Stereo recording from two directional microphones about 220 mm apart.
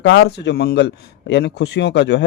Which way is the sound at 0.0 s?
55° left (ahead or behind).